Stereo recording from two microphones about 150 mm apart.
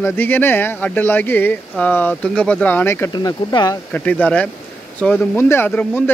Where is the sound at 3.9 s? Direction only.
10° left (ahead or behind).